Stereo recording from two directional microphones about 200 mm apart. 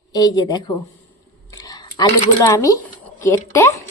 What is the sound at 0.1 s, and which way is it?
Speech, 20° left (ahead or behind).